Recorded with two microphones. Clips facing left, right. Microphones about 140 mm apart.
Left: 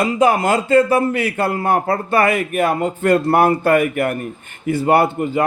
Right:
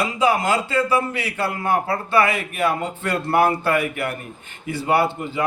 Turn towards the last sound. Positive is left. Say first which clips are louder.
# left 5 dB
turn(degrees=50)  # may be behind; listen again after turning